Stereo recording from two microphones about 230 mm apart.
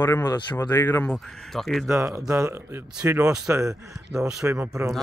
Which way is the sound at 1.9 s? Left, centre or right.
Centre.